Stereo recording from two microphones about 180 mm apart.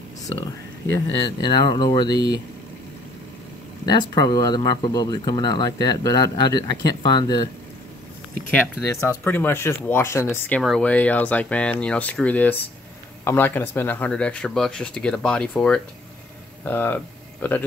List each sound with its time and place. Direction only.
1.4 s speech: 25° left (ahead or behind)
3.8 s speech: 20° left (ahead or behind)
8.5 s speech: 10° left (ahead or behind)